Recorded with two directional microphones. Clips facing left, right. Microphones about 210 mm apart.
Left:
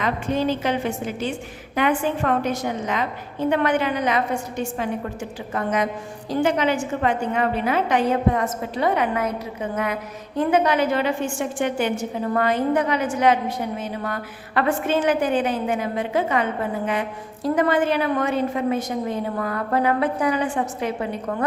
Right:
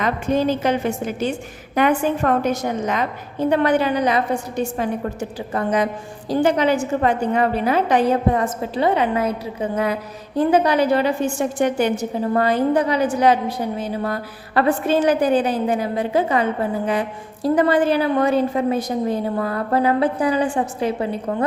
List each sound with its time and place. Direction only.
0.0 s a woman's voice: 45° right (ahead or behind)